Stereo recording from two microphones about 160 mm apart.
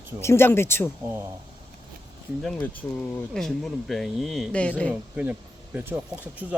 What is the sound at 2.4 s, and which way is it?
Speech, 5° left (ahead or behind).